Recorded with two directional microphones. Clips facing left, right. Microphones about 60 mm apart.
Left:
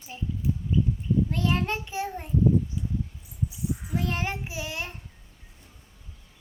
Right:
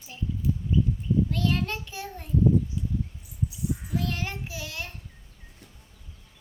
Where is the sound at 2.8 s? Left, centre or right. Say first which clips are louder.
Even; centre.